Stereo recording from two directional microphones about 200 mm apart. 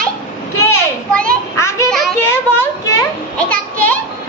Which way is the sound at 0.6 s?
15° left (ahead or behind).